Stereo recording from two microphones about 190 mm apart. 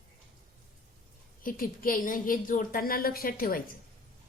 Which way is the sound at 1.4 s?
45° left (ahead or behind).